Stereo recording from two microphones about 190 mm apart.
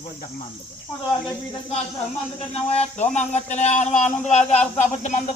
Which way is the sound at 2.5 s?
35° left (ahead or behind).